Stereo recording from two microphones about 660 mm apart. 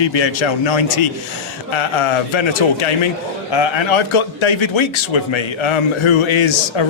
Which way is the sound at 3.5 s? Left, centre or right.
Left.